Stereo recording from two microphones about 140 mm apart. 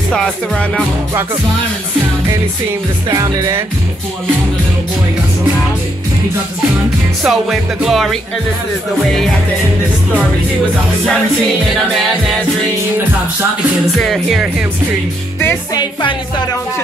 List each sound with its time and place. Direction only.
0.1 s music: 5° left (ahead or behind)
3.2 s speech: 25° right (ahead or behind)
7.2 s music: centre (ahead or behind)
13.9 s music: centre (ahead or behind)
15.7 s speech: 35° left (ahead or behind)